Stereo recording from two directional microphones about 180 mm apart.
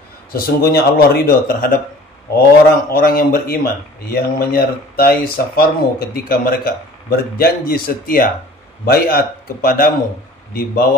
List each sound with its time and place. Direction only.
0.3 s speech: 60° left (ahead or behind)
2.9 s speech: 55° left (ahead or behind)